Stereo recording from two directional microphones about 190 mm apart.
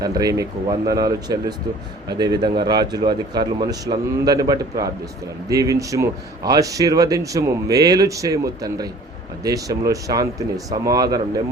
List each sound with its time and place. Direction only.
0.0 s speech: 20° right (ahead or behind)